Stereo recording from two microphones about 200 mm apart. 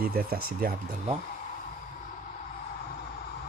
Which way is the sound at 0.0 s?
45° right (ahead or behind).